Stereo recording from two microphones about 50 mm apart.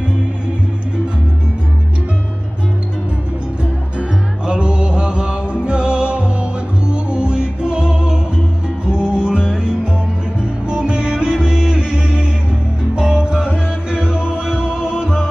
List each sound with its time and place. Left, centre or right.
4.5 s music: right